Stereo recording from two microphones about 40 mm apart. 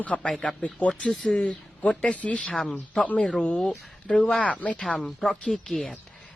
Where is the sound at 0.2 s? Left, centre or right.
Left.